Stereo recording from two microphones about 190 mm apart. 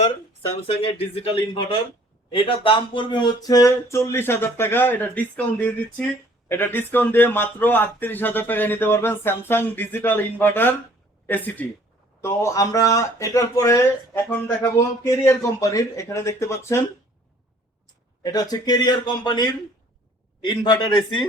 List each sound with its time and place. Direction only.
0.8 s speech: 30° left (ahead or behind)
18.2 s speech: 20° left (ahead or behind)